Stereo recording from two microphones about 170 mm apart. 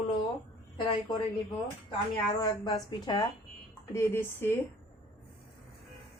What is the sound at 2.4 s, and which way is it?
Speech, 20° left (ahead or behind).